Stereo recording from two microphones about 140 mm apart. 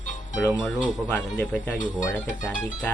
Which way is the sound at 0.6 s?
5° left (ahead or behind).